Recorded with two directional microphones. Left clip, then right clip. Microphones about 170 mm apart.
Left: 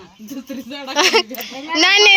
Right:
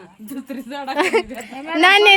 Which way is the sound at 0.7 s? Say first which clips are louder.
Left 3 dB; 5° left (ahead or behind).